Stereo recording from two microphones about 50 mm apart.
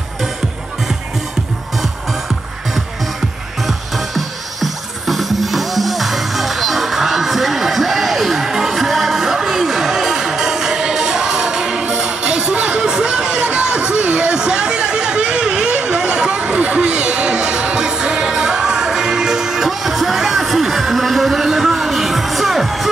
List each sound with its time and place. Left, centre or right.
3.6 s music: centre; by 12.9 s right
12.9 s a sound: centre
13.5 s chatter: right
18.3 s music: centre